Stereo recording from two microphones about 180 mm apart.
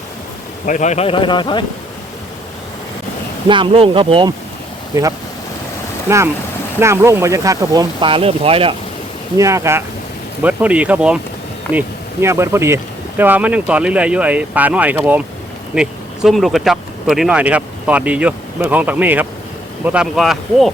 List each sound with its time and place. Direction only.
0.6 s speech: 45° left (ahead or behind); by 1.6 s 25° left (ahead or behind)
3.5 s speech: 30° right (ahead or behind)
4.9 s speech: 20° right (ahead or behind)
9.4 s speech: 15° right (ahead or behind); by 20.7 s centre (ahead or behind)